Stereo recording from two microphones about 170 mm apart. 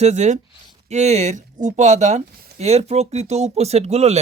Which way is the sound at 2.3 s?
65° right (ahead or behind).